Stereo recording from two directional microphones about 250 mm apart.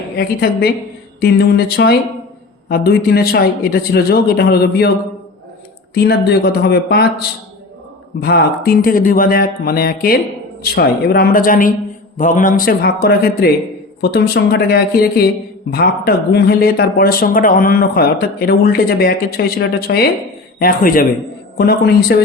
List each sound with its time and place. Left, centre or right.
0.2 s speech: left
5.9 s speech: left